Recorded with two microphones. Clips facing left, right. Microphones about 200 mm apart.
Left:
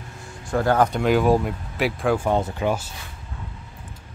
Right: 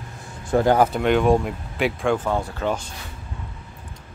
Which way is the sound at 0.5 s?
20° right (ahead or behind).